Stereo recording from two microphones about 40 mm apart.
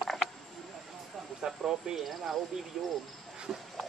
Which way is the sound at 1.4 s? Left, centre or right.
Centre.